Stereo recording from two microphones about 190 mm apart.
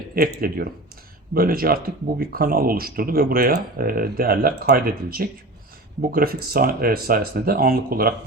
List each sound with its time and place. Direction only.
0.1 s speech: 50° right (ahead or behind)